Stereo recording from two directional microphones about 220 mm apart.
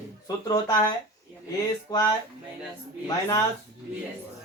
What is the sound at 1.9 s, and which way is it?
Speech, 15° left (ahead or behind).